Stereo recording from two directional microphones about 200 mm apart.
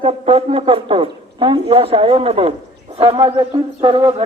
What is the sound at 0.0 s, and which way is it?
A man's voice, 30° right (ahead or behind).